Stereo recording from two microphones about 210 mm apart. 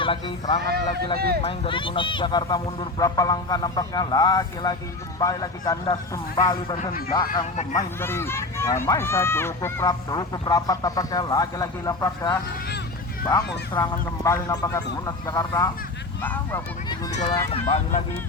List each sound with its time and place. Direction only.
0.0 s speech: 25° left (ahead or behind)
0.6 s speech: 50° right (ahead or behind)
1.4 s speech: 25° left (ahead or behind)
7.5 s speech: 35° left (ahead or behind)
7.8 s speech: 10° left (ahead or behind)
13.8 s speech: 15° left (ahead or behind)
17.2 s speech: 25° left (ahead or behind)